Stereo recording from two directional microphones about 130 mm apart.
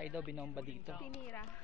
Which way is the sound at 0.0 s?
10° right (ahead or behind).